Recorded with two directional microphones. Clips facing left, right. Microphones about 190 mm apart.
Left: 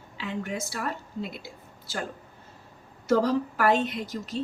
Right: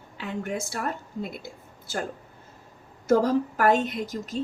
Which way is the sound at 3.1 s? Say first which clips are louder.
Right 2 dB; 50° right (ahead or behind).